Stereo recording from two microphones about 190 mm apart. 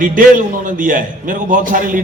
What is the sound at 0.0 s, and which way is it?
A man's voice, 45° right (ahead or behind).